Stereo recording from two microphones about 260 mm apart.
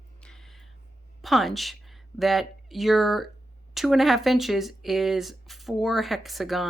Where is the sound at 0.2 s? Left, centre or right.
Centre.